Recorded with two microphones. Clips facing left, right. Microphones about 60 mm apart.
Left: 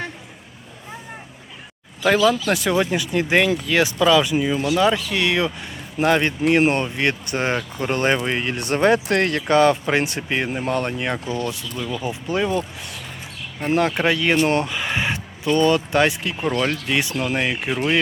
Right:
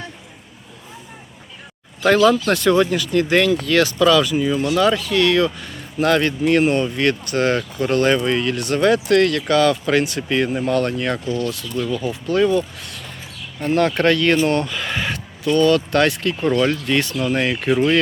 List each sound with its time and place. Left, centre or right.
2.0 s speech: centre